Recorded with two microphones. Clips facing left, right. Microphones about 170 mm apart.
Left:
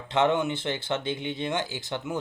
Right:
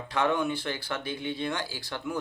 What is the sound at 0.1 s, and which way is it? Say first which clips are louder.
Speech: left 3 dB; 20° left (ahead or behind).